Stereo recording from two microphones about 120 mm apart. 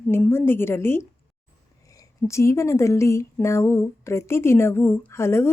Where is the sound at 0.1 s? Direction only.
20° left (ahead or behind).